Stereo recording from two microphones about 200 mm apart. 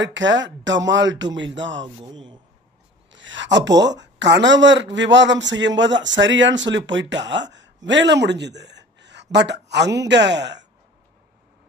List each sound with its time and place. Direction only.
0.0 s a man's voice: 65° right (ahead or behind)